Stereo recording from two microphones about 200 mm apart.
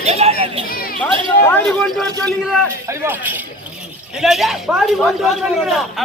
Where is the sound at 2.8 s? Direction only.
10° right (ahead or behind).